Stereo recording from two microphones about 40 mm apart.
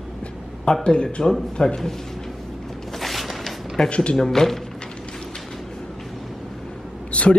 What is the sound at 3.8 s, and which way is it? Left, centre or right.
Speech, left.